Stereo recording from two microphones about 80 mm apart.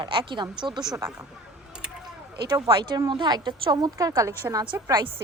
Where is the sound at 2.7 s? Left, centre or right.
Right.